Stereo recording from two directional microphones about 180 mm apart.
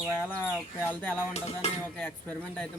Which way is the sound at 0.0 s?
10° left (ahead or behind).